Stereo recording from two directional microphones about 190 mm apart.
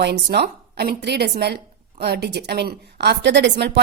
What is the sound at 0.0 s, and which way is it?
A woman's voice, 60° right (ahead or behind).